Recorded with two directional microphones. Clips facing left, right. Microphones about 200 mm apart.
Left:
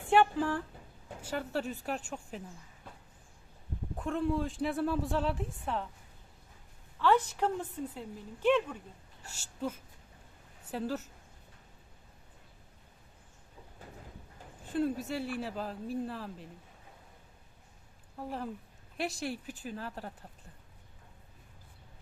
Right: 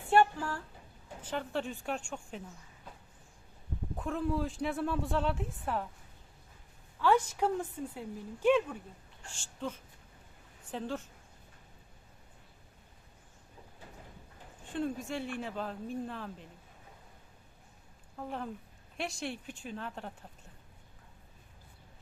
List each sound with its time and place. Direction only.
0.1 s a sound: 15° left (ahead or behind)
1.2 s speech: 10° left (ahead or behind)
3.9 s speech: centre (ahead or behind)
7.0 s a woman's voice: 10° right (ahead or behind)
9.2 s a woman's voice: 10° left (ahead or behind)
14.7 s speech: 5° left (ahead or behind)
18.9 s speech: centre (ahead or behind)